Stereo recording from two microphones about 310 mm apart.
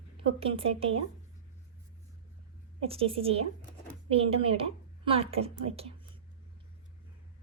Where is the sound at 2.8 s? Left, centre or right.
Centre.